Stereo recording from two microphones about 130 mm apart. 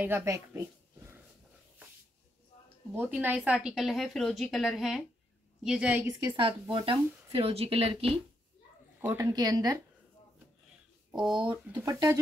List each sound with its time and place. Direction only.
0.0 s speech: 20° right (ahead or behind)
3.0 s a woman's voice: 15° right (ahead or behind)
6.0 s a woman's voice: 30° right (ahead or behind); by 8.1 s 50° right (ahead or behind)
9.1 s a woman's voice: 30° right (ahead or behind)
11.1 s speech: 5° right (ahead or behind)
11.7 s a woman's voice: 30° right (ahead or behind)